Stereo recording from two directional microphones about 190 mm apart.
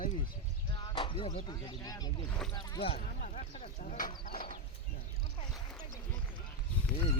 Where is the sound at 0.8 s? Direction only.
25° left (ahead or behind).